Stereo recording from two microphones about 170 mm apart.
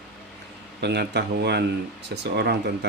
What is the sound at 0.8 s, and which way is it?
Speech, 80° right.